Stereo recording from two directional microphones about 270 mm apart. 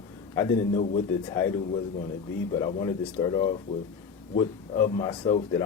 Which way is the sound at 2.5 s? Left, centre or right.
Centre.